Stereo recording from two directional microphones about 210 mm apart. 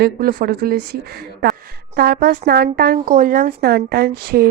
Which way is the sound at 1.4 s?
50° right (ahead or behind).